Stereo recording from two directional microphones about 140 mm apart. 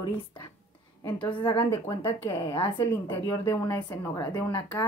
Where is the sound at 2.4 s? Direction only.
40° left (ahead or behind).